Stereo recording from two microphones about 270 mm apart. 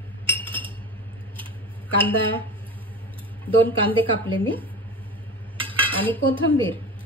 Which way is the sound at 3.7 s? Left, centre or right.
Centre.